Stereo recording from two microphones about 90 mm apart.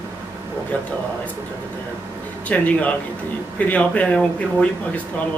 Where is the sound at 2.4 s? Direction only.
15° left (ahead or behind).